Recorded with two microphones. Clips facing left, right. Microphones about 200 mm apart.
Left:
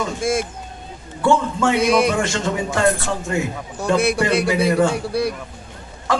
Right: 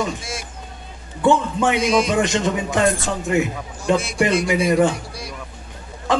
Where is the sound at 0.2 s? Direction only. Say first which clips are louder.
Left 12 dB; 50° left (ahead or behind).